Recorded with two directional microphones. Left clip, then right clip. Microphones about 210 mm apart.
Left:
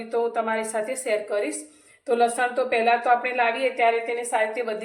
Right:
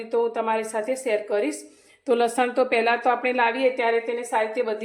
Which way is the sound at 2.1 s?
45° right (ahead or behind).